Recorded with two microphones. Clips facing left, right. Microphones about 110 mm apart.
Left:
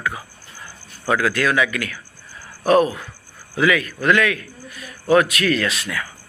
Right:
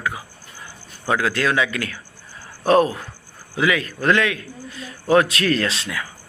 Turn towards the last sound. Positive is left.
turn(degrees=-25)  # may be behind; listen again after turning